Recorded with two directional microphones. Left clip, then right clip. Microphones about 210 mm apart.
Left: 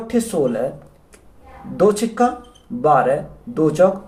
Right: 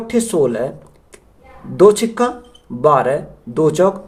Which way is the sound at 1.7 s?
55° right (ahead or behind).